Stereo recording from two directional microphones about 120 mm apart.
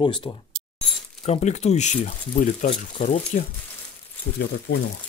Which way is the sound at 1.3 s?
65° left (ahead or behind).